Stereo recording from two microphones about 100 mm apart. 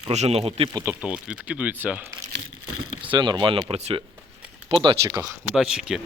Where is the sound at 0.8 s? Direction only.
10° right (ahead or behind).